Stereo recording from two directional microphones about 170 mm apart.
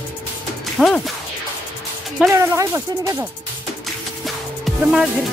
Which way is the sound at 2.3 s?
15° right (ahead or behind).